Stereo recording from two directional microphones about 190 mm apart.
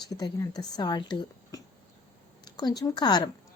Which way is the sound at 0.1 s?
20° left (ahead or behind).